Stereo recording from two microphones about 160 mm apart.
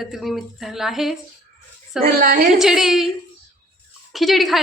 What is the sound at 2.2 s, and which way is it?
Speech, 60° right (ahead or behind).